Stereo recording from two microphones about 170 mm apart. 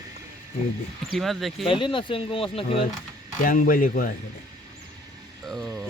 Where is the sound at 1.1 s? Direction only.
Centre (ahead or behind).